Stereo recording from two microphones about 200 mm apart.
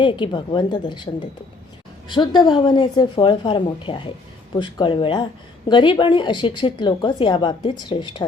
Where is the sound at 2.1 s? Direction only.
20° left (ahead or behind).